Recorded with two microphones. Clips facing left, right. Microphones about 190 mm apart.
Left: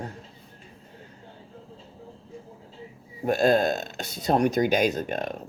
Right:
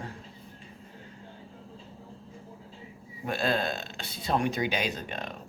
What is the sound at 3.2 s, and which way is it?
Speech, 45° left (ahead or behind).